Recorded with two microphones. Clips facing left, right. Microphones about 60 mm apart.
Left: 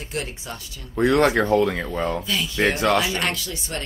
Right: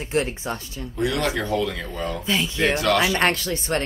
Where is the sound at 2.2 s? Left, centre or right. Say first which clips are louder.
Even; right.